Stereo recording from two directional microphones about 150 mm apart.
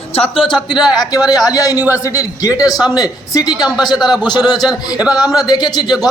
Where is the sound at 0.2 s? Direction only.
35° left (ahead or behind).